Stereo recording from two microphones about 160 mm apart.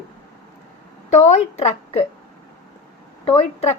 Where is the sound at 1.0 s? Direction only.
45° left (ahead or behind).